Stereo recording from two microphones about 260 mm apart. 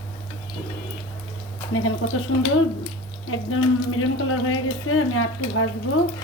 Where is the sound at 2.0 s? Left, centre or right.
Left.